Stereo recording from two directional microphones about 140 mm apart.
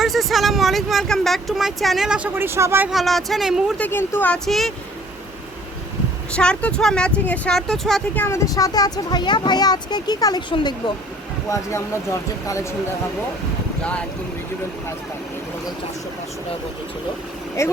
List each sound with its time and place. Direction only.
0.0 s speech: centre (ahead or behind); by 2.9 s 15° right (ahead or behind)
2.9 s speech: centre (ahead or behind)
3.8 s speech: 15° left (ahead or behind)
4.4 s speech: centre (ahead or behind)
6.3 s speech: 5° left (ahead or behind)
8.1 s speech: 15° left (ahead or behind); by 10.9 s 35° left (ahead or behind)
11.4 s speech: 20° left (ahead or behind)
17.6 s speech: 20° left (ahead or behind)